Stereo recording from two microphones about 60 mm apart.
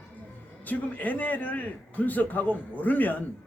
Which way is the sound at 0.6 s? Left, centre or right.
Left.